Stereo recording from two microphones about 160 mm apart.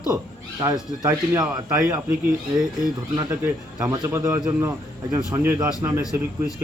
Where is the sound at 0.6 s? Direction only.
15° right (ahead or behind).